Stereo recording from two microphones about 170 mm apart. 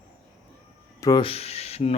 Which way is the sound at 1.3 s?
40° left (ahead or behind).